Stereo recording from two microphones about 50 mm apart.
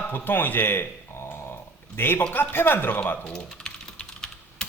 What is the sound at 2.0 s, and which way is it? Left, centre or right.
A man's voice, left.